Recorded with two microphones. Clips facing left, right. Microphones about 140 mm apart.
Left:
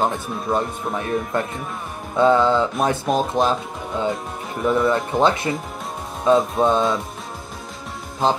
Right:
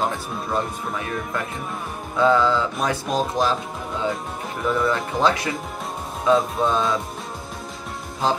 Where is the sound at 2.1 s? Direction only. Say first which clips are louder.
Left 2 dB; 20° left (ahead or behind).